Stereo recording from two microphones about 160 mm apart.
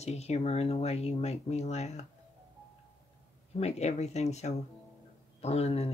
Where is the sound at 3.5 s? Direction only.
45° left (ahead or behind).